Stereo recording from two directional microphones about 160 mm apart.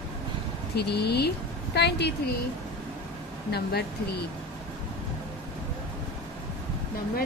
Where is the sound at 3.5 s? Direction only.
90° left.